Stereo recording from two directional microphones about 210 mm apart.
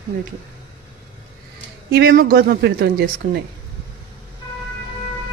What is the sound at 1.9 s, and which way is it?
Speech, 45° right (ahead or behind).